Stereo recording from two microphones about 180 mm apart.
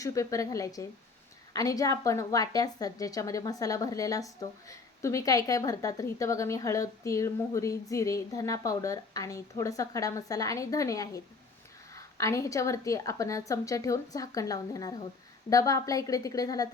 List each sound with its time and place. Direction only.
0.0 s a woman's voice: 20° left (ahead or behind)